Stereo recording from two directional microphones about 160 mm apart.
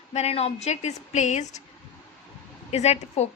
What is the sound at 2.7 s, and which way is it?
Speech, 40° left (ahead or behind).